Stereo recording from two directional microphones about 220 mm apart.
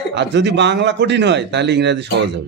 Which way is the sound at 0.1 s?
55° right (ahead or behind).